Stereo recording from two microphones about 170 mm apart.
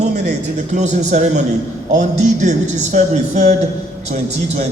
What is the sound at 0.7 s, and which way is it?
Speech, 45° right (ahead or behind).